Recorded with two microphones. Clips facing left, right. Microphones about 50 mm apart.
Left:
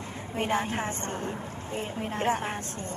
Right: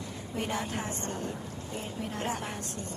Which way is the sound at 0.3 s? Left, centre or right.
Left.